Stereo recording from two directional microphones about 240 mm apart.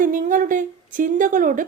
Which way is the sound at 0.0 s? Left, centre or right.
Right.